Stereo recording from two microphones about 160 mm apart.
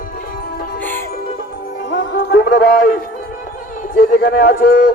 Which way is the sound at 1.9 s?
90° left.